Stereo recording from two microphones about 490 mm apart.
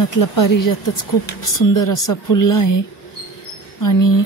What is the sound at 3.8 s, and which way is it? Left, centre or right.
Speech, left.